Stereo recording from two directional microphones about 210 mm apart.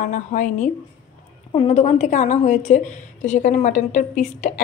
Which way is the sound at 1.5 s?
25° left (ahead or behind).